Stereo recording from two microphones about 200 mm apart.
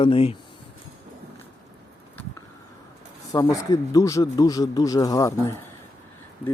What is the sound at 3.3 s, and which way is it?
Speech, 15° left (ahead or behind).